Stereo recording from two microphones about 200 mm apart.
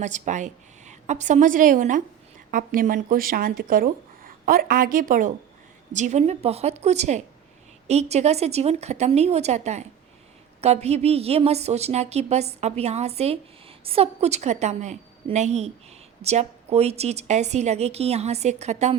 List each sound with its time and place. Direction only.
0.0 s a woman's voice: 35° right (ahead or behind)